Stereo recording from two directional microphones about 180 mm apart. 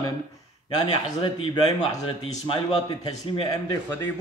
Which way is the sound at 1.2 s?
25° left (ahead or behind).